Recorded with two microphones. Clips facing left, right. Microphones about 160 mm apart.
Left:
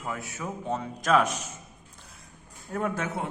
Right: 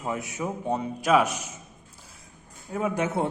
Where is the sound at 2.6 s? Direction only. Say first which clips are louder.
Right 2 dB; centre (ahead or behind).